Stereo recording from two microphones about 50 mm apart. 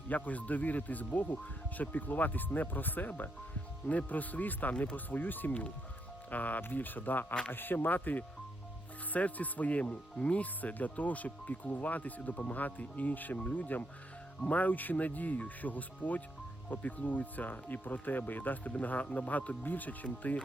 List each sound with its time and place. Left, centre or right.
0.1 s speech: left